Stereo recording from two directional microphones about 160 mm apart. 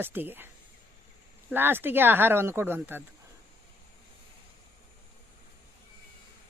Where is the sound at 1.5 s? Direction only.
15° right (ahead or behind).